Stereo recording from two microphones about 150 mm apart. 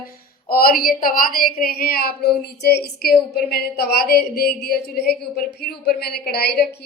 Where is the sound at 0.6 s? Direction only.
75° left (ahead or behind).